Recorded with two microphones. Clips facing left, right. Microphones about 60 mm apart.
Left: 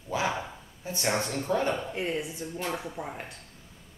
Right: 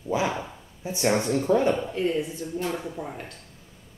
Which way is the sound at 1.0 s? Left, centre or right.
Centre.